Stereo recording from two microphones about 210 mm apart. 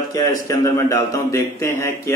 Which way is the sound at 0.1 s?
15° left (ahead or behind).